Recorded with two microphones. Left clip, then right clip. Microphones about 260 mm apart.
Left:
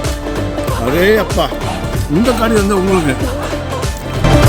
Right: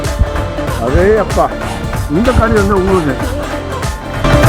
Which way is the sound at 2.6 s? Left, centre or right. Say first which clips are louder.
Right 2 dB; centre.